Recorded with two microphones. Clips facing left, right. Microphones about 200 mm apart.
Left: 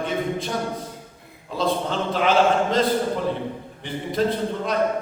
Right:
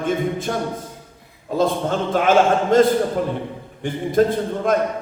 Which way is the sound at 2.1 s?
50° right (ahead or behind).